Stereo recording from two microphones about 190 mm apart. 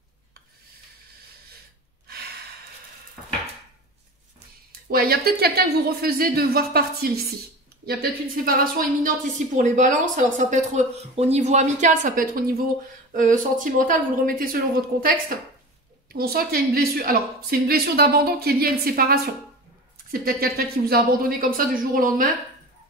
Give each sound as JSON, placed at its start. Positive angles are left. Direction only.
{"t": 4.9, "sound": "a woman's voice", "side_deg": -50}